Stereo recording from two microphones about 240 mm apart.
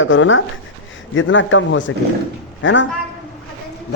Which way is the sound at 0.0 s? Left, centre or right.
Left.